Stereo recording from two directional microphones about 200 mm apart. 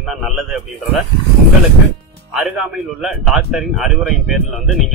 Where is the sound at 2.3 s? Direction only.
5° right (ahead or behind).